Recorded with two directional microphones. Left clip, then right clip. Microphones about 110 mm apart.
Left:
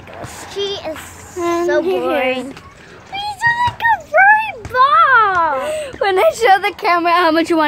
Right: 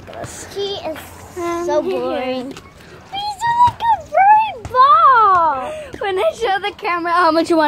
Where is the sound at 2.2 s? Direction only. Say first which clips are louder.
Left 5 dB; 10° right (ahead or behind).